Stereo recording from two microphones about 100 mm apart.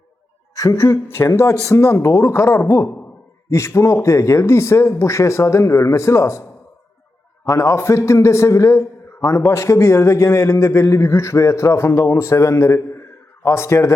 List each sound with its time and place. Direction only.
0.5 s a woman's voice: 30° left (ahead or behind)
7.4 s a man's voice: 30° left (ahead or behind)